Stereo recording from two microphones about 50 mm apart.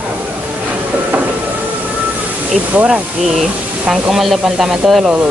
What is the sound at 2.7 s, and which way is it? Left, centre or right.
Speech, right.